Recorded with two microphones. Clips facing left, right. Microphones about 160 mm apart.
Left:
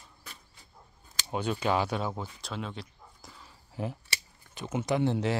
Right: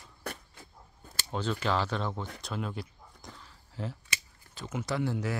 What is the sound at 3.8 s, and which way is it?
Speech, 15° left (ahead or behind).